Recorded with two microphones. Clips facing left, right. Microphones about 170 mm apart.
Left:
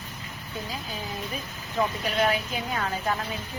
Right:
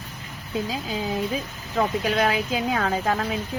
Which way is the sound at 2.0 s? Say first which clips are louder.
Right 3 dB; 90° right.